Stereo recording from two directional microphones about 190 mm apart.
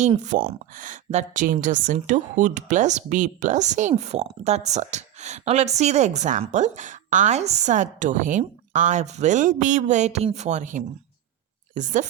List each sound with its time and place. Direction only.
0.2 s a woman's voice: 40° right (ahead or behind)